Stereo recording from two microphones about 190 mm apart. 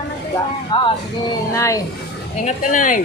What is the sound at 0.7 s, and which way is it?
Speech, 25° left (ahead or behind).